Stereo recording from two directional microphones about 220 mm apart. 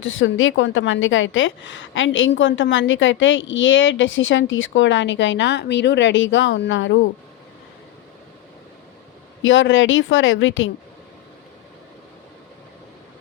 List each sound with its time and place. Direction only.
0.0 s a woman's voice: 60° left (ahead or behind)
9.4 s a woman's voice: 60° left (ahead or behind)